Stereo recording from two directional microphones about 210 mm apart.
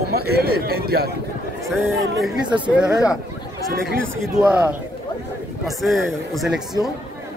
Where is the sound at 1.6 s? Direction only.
Centre (ahead or behind).